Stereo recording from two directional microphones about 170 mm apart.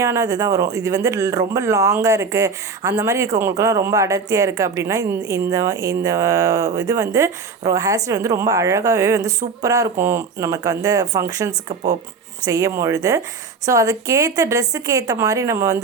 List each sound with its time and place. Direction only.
0.0 s a woman's voice: 20° right (ahead or behind)